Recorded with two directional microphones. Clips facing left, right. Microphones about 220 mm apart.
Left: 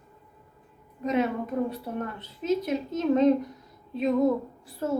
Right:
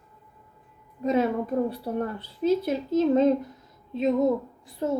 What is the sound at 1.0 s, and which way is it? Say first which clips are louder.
A woman's voice: right 2 dB; 35° right (ahead or behind).